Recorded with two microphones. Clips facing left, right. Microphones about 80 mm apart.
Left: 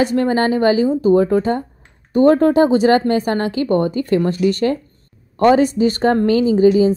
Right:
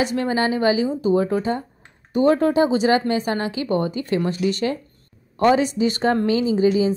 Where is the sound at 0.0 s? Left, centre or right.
Left.